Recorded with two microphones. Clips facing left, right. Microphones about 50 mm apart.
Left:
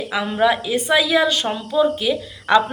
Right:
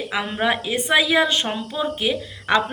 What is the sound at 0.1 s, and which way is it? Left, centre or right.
Speech, right.